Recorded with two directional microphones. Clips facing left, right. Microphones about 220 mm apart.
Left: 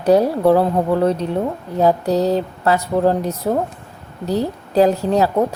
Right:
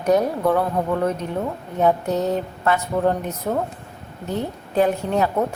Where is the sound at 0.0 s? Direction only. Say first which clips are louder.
Left 5 dB; 30° left (ahead or behind).